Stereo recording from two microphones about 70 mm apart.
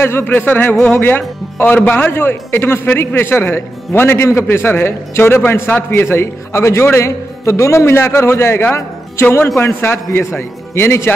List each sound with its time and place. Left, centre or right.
0.0 s a man's voice: left